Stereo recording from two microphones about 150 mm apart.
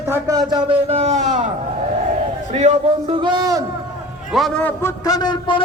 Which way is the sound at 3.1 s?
30° right (ahead or behind).